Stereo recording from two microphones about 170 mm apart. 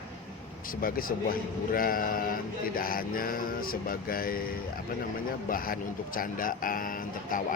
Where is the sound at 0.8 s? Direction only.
60° left (ahead or behind).